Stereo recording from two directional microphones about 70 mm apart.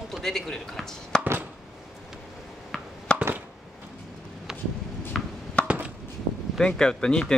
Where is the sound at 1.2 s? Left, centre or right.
Right.